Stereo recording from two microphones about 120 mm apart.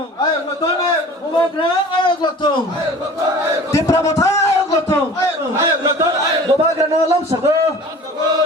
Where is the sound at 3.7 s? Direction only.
25° left (ahead or behind).